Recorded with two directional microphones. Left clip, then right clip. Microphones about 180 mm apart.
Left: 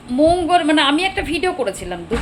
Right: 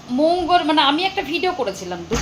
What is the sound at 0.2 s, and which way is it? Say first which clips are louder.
A woman's voice: left 2 dB; 15° left (ahead or behind).